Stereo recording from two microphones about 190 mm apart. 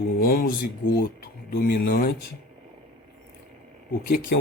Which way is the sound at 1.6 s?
50° left (ahead or behind).